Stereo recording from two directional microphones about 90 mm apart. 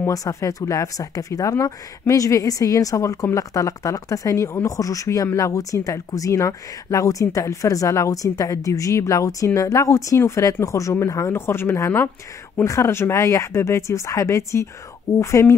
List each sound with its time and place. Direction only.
0.0 s speech: 40° left (ahead or behind)